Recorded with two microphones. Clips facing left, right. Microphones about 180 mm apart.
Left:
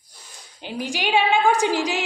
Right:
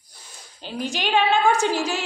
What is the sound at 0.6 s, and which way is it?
A woman's voice, 15° left (ahead or behind).